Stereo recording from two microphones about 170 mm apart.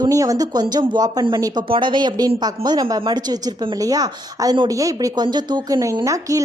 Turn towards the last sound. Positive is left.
turn(degrees=-20)  # may be behind; listen again after turning